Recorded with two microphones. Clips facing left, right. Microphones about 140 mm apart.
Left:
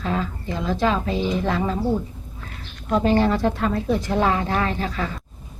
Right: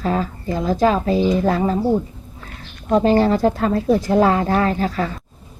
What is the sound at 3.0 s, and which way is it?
A woman's voice, 40° right (ahead or behind).